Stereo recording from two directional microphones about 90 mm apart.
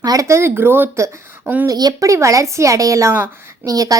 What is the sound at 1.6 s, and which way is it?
A woman's voice, 45° right (ahead or behind).